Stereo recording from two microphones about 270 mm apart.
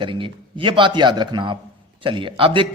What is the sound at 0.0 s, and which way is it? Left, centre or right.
Speech, centre.